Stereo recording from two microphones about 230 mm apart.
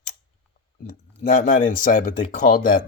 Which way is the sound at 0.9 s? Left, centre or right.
Left.